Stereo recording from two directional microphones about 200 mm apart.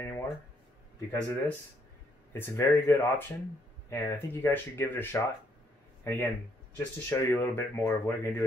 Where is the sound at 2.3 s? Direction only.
10° left (ahead or behind).